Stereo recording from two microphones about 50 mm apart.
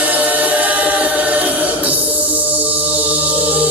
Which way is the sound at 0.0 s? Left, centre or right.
Right.